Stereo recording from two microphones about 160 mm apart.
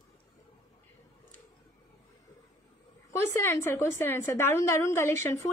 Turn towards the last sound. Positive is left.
turn(degrees=15)  # may be behind; listen again after turning